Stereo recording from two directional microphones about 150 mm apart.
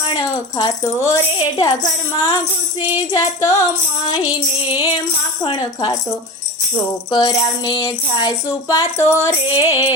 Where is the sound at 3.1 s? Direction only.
20° left (ahead or behind).